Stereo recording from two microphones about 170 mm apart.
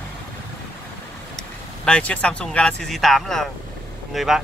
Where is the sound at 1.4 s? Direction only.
5° left (ahead or behind).